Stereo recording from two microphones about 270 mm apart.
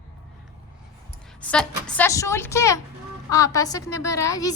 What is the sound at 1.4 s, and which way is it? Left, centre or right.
A woman's voice, centre.